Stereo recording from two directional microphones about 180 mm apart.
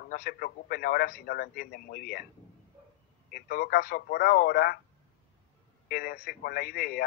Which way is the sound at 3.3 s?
55° left (ahead or behind).